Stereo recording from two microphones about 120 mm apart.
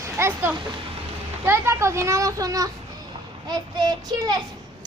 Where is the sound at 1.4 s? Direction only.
20° right (ahead or behind).